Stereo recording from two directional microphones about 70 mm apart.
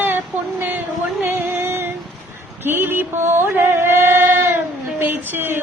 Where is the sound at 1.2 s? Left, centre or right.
Right.